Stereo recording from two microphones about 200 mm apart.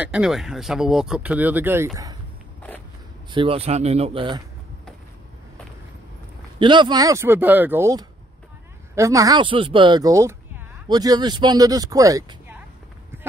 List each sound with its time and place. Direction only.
0.0 s speech: 5° right (ahead or behind)
3.3 s speech: 25° right (ahead or behind)
6.6 s speech: 25° right (ahead or behind)